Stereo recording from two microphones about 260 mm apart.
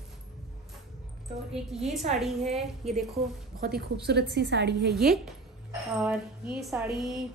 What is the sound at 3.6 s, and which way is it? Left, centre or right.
A woman's voice, right.